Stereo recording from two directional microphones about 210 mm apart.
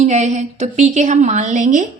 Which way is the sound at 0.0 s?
35° right (ahead or behind).